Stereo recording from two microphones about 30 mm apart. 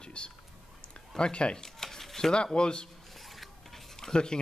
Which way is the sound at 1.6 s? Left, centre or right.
Centre.